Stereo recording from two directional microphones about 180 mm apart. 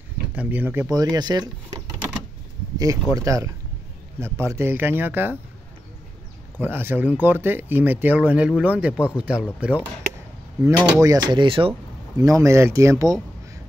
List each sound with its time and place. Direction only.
0.3 s speech: 10° right (ahead or behind)
2.8 s speech: 20° right (ahead or behind)
6.6 s speech: 10° right (ahead or behind)
11.0 s speech: 20° right (ahead or behind)
12.2 s speech: 20° right (ahead or behind)